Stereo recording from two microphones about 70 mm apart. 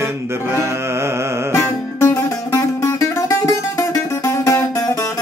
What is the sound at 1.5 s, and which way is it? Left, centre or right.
Music, left.